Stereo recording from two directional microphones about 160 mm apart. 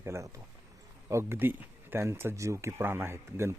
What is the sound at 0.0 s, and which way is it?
Speech, 15° right (ahead or behind).